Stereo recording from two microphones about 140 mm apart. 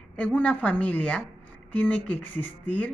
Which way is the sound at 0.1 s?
10° left (ahead or behind).